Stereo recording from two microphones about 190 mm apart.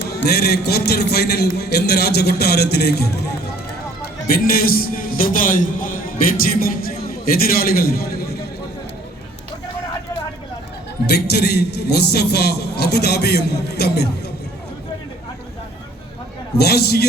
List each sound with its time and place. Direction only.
0.1 s a man's voice: 55° left (ahead or behind)
4.5 s a man's voice: 50° left (ahead or behind)
11.0 s a man's voice: 60° left (ahead or behind)
16.6 s a man's voice: 60° left (ahead or behind)